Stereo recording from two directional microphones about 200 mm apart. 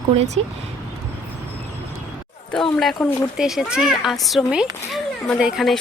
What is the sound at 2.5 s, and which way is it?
A child's voice, centre (ahead or behind).